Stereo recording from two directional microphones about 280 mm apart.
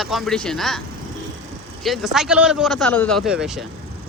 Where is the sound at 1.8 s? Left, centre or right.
Centre.